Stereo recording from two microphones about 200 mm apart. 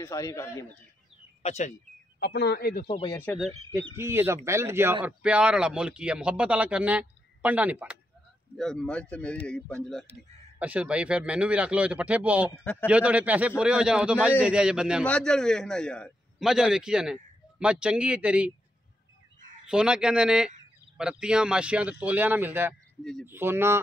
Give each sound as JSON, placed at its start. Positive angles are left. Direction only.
{"t": 0.0, "sound": "a man's voice", "side_deg": 15}
{"t": 1.4, "sound": "speech", "side_deg": 35}
{"t": 2.1, "sound": "a man's voice", "side_deg": 60}
{"t": 2.8, "sound": "speech", "side_deg": 25}
{"t": 3.2, "sound": "a man's voice", "side_deg": 5}
{"t": 3.9, "sound": "a man's voice", "side_deg": -10}
{"t": 10.6, "sound": "a man's voice", "side_deg": -5}
{"t": 19.7, "sound": "a man's voice", "side_deg": -5}